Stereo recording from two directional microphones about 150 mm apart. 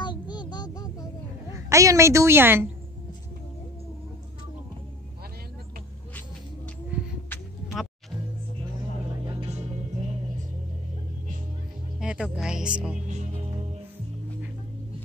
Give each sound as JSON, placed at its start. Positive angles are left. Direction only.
{"t": 0.0, "sound": "a sound", "side_deg": 30}
{"t": 1.5, "sound": "a woman's voice", "side_deg": -20}
{"t": 7.6, "sound": "music", "side_deg": 0}
{"t": 9.2, "sound": "music", "side_deg": -30}
{"t": 12.0, "sound": "music", "side_deg": -5}